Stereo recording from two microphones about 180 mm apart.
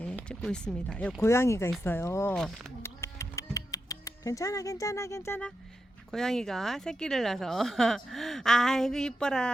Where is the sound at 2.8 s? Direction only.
15° left (ahead or behind).